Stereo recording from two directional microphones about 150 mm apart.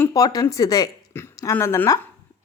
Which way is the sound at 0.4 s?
25° left (ahead or behind).